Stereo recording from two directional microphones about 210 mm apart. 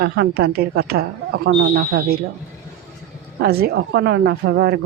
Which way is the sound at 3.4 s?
50° right (ahead or behind).